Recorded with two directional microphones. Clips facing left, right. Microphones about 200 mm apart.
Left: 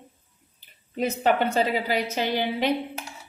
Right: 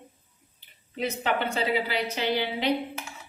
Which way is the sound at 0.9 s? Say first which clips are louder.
Left 5 dB; 45° left (ahead or behind).